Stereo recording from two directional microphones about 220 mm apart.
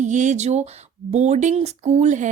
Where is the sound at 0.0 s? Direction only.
35° right (ahead or behind).